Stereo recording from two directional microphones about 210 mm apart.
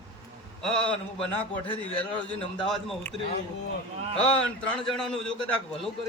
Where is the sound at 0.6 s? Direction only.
5° left (ahead or behind).